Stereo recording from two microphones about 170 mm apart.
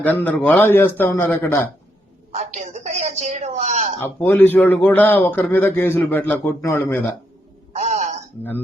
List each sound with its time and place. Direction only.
0.0 s a man's voice: 10° left (ahead or behind)
2.3 s a woman's voice: 45° right (ahead or behind)
4.0 s a man's voice: 10° left (ahead or behind)
7.7 s a sound: 40° right (ahead or behind)